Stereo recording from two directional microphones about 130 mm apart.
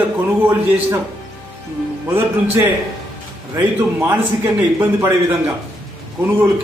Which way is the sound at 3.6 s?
15° right (ahead or behind).